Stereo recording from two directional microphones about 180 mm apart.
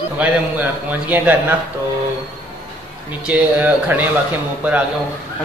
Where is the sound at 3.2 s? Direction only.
10° right (ahead or behind).